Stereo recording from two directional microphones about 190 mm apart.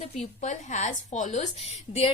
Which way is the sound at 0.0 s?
35° left (ahead or behind).